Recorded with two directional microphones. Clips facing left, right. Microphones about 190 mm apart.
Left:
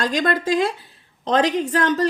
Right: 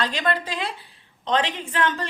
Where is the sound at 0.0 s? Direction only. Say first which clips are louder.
Left 4 dB; 45° left (ahead or behind).